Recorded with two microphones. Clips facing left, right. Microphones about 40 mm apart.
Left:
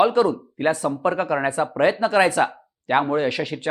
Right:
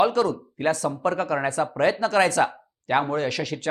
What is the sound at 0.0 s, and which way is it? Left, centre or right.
Speech, left.